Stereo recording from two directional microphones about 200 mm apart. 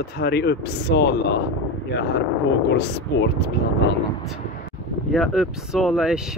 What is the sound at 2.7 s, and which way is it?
Speech, 55° left (ahead or behind).